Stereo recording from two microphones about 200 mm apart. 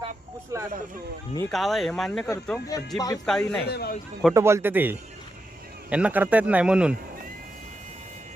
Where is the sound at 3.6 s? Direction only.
55° left (ahead or behind).